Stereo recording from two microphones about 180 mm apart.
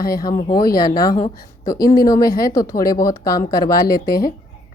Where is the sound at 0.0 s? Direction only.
55° left (ahead or behind).